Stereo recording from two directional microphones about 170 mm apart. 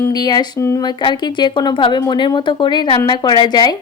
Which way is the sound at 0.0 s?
25° left (ahead or behind).